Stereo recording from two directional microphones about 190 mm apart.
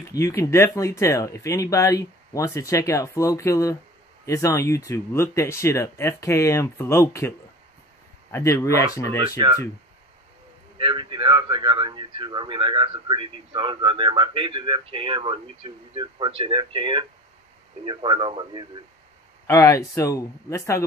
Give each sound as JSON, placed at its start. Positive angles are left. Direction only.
{"t": 0.1, "sound": "speech", "side_deg": 15}
{"t": 10.8, "sound": "a man's voice", "side_deg": -25}
{"t": 19.4, "sound": "speech", "side_deg": 15}